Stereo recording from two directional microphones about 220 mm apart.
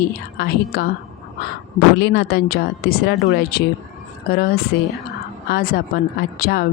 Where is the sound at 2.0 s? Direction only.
50° left (ahead or behind).